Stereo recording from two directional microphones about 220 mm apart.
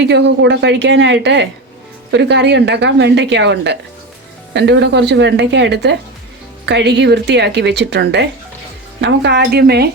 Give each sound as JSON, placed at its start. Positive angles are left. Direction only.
{"t": 0.0, "sound": "a woman's voice", "side_deg": -50}